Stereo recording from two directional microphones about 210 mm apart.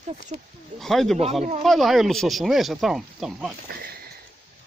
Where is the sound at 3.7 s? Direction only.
45° right (ahead or behind).